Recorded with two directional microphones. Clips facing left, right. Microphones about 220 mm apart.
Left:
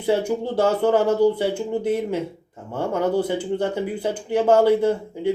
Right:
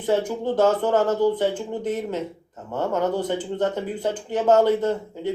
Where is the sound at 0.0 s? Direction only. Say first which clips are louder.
Left 1 dB; 10° left (ahead or behind).